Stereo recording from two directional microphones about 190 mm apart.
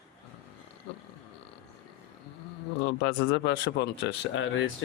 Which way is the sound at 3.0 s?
65° left (ahead or behind).